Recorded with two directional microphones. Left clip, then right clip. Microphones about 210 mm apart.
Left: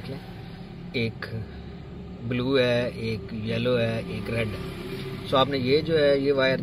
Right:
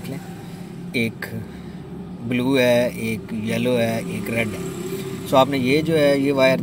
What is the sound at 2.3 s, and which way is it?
Speech, 15° right (ahead or behind).